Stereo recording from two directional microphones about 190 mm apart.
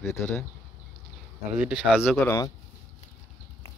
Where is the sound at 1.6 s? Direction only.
5° right (ahead or behind).